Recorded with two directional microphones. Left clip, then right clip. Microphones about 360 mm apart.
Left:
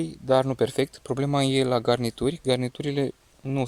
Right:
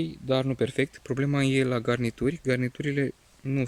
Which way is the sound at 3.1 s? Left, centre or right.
Left.